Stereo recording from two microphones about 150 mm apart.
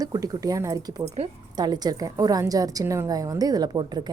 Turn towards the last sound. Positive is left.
turn(degrees=-30)  # may be behind; listen again after turning